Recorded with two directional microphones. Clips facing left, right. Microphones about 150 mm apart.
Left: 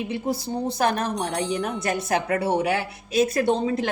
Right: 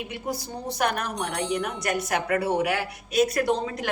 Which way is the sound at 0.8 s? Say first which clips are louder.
Left 2 dB; 30° left (ahead or behind).